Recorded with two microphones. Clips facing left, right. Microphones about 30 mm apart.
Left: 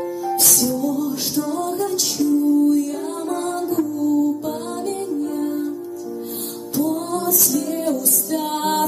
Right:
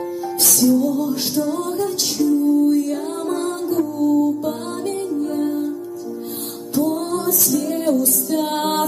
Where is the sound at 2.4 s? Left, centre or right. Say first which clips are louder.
Left 1 dB; right.